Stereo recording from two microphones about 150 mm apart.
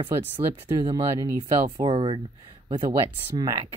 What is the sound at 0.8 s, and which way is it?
Speech, 30° right (ahead or behind).